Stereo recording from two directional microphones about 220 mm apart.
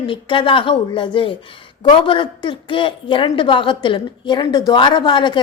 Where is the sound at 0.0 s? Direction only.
20° left (ahead or behind).